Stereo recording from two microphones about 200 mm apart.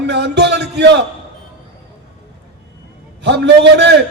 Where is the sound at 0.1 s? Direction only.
60° right (ahead or behind).